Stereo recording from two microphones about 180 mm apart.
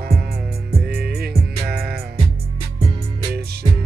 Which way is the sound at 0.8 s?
60° right (ahead or behind).